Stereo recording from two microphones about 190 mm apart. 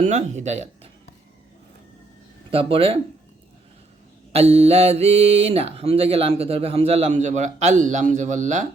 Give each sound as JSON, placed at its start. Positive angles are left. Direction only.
{"t": 0.0, "sound": "speech", "side_deg": -40}
{"t": 2.5, "sound": "speech", "side_deg": -30}
{"t": 4.3, "sound": "speech", "side_deg": -35}